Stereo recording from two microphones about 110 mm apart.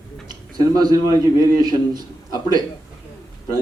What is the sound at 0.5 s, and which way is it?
A woman's voice, 35° right (ahead or behind).